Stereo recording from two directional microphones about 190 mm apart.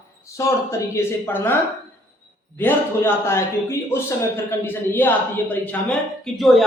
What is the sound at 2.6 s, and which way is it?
A man's voice, 10° left (ahead or behind).